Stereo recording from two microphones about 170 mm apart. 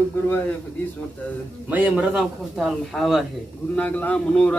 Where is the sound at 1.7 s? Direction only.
10° right (ahead or behind); by 4.5 s 10° left (ahead or behind).